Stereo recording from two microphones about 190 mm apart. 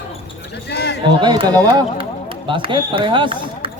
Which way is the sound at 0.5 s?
60° left (ahead or behind).